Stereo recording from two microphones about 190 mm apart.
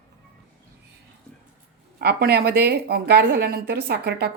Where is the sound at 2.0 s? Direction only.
55° right (ahead or behind).